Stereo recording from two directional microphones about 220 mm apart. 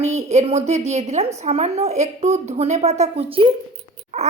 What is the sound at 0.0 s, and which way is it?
A woman's voice, 30° right (ahead or behind).